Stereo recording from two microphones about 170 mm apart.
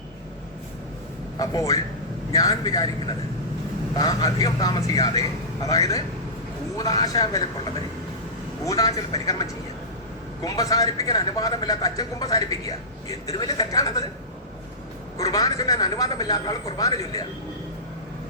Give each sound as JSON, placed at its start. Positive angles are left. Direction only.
{"t": 1.4, "sound": "a man's voice", "side_deg": 20}
{"t": 3.9, "sound": "a man's voice", "side_deg": 20}
{"t": 8.6, "sound": "a man's voice", "side_deg": 20}
{"t": 15.2, "sound": "a man's voice", "side_deg": 20}